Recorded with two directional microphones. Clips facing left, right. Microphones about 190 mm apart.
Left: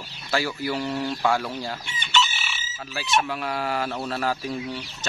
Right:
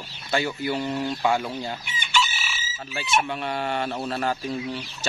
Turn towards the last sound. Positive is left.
turn(degrees=0)  # may be behind; listen again after turning